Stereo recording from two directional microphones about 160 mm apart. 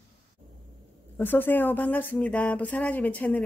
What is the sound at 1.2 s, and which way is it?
Speech, 15° left (ahead or behind).